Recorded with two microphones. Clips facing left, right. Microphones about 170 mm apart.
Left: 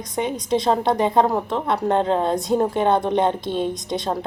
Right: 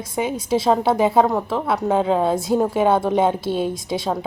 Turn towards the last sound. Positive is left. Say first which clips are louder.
# right 1 dB
turn(degrees=-5)  # may be behind; listen again after turning